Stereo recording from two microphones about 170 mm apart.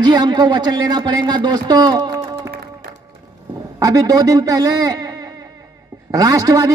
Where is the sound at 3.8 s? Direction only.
20° right (ahead or behind).